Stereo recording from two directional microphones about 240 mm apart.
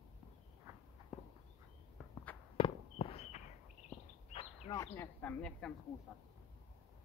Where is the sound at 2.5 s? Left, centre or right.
Left.